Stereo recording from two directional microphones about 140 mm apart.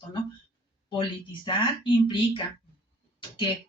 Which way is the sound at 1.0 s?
35° left (ahead or behind).